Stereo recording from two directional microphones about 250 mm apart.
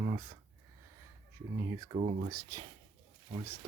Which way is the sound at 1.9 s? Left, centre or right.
Right.